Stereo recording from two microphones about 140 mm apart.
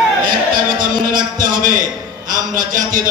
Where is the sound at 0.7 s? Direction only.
75° right (ahead or behind).